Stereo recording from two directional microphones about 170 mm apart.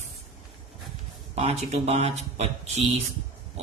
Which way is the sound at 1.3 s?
40° right (ahead or behind).